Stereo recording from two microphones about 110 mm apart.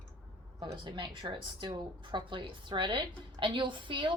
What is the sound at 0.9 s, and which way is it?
A woman's voice, 45° right (ahead or behind).